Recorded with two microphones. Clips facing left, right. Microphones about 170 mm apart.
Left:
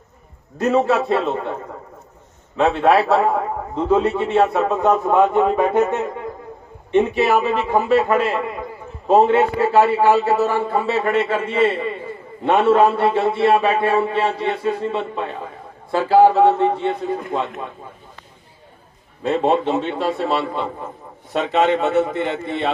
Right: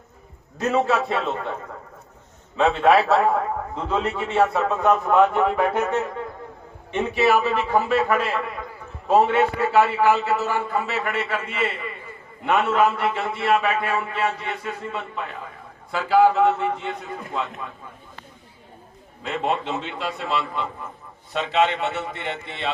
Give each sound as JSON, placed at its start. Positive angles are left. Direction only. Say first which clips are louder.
{"t": 0.6, "sound": "a man's voice", "louder": "left 4 dB", "side_deg": 15}
{"t": 2.6, "sound": "a man's voice", "louder": "left 2 dB", "side_deg": 20}
{"t": 19.2, "sound": "a man's voice", "louder": "left 8 dB", "side_deg": 30}
{"t": 21.3, "sound": "a man's voice", "louder": "left 4 dB", "side_deg": 45}